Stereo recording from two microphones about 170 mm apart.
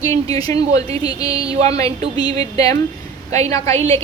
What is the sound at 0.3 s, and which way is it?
A woman's voice, 20° left (ahead or behind).